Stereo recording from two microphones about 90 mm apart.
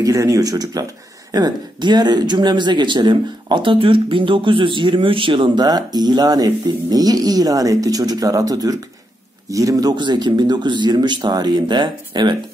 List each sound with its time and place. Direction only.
0.0 s speech: 40° right (ahead or behind)
1.3 s speech: 55° right (ahead or behind); by 5.5 s 70° right (ahead or behind)
5.6 s speech: 50° right (ahead or behind)